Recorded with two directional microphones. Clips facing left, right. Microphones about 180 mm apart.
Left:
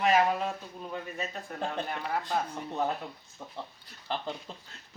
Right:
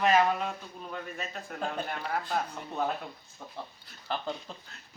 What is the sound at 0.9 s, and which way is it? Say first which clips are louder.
Speech: left 2 dB; 5° left (ahead or behind).